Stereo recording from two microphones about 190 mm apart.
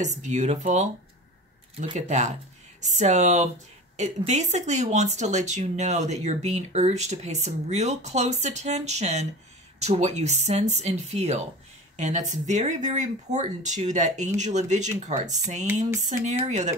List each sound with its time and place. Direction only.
0.0 s speech: 40° right (ahead or behind)
2.0 s speech: 40° right (ahead or behind)